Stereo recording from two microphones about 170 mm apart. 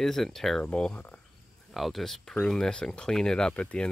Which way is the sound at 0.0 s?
Centre (ahead or behind).